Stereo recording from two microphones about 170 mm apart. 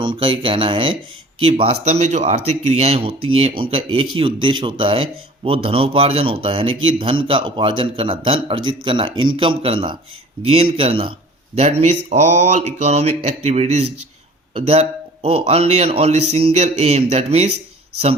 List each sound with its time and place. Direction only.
0.0 s speech: 30° right (ahead or behind)